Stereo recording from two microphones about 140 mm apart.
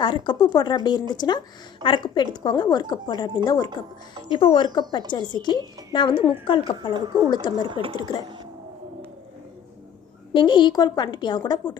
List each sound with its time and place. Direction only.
0.0 s speech: 35° left (ahead or behind)
6.9 s speech: 30° right (ahead or behind)
7.9 s speech: 30° left (ahead or behind)
10.3 s speech: 35° left (ahead or behind)